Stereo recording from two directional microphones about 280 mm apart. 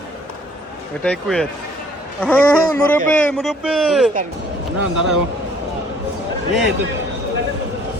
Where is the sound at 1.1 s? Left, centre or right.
Centre.